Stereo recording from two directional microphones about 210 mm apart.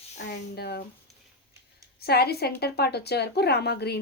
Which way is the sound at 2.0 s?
50° left (ahead or behind).